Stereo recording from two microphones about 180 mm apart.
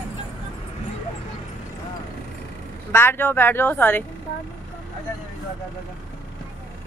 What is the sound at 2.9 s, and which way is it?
Speech, 10° left (ahead or behind).